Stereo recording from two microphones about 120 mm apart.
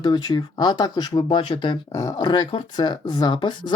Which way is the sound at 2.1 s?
35° left (ahead or behind).